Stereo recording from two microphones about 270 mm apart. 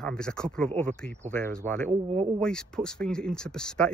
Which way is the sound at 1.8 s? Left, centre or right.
Right.